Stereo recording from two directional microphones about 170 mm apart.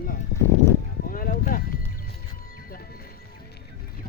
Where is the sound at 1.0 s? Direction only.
55° left (ahead or behind).